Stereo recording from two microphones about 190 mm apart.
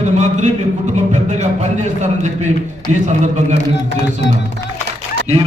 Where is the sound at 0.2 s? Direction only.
40° right (ahead or behind).